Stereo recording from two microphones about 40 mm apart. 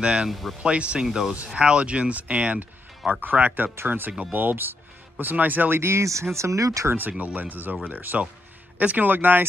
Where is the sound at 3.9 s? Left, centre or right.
Right.